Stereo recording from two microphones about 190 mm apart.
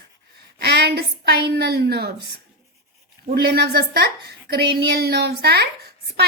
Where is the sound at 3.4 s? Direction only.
55° right (ahead or behind).